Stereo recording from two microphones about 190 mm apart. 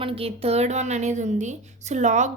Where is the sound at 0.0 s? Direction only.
30° right (ahead or behind).